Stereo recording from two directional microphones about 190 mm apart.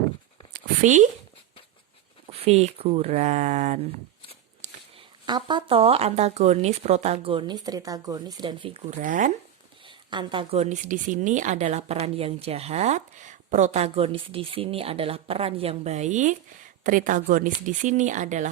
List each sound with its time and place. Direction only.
0.5 s a sound: 40° right (ahead or behind)
2.2 s speech: 30° right (ahead or behind)
4.6 s speech: 25° right (ahead or behind)
9.0 s speech: 45° right (ahead or behind)
9.8 s speech: 25° right (ahead or behind); by 18.4 s 40° right (ahead or behind)